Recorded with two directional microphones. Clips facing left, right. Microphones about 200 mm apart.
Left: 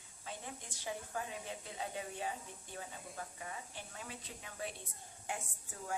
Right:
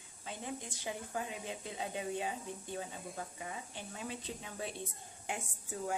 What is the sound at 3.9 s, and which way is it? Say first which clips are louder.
Speech: right 9 dB; 25° right (ahead or behind).